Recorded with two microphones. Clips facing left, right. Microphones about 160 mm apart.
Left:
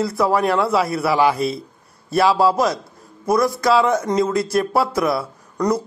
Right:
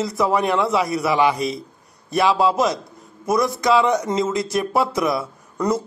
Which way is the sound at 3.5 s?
20° right (ahead or behind).